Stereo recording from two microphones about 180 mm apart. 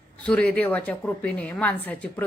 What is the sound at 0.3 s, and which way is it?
Speech, 5° left (ahead or behind).